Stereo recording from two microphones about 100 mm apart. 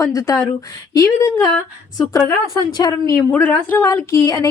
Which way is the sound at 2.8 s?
40° left (ahead or behind).